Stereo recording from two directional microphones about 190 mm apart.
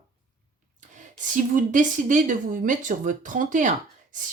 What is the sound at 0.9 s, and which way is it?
Speech, 40° right (ahead or behind).